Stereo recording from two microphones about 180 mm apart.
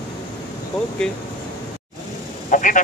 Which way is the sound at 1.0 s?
5° left (ahead or behind).